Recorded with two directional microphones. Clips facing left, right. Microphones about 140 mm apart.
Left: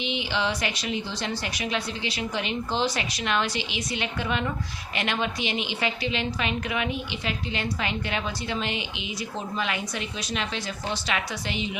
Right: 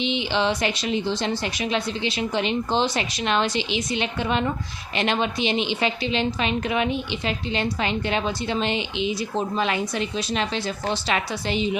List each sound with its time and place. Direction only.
0.0 s a woman's voice: 25° right (ahead or behind)